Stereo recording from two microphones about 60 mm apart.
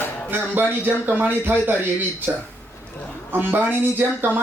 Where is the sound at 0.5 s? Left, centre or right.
Right.